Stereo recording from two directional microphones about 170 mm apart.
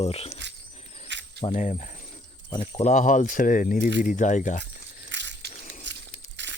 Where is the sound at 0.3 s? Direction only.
90° right.